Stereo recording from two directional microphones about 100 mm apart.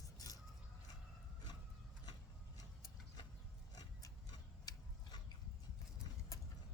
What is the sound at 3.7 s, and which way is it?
Rub, 40° left (ahead or behind).